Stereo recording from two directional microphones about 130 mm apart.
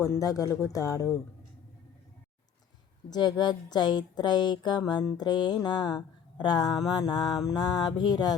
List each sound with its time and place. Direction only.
0.0 s speech: 25° left (ahead or behind)
3.1 s speech: 35° left (ahead or behind)